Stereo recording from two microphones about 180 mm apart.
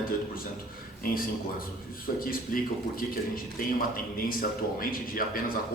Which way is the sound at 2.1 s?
55° left (ahead or behind).